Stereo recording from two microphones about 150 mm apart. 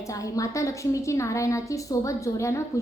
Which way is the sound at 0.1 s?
20° left (ahead or behind).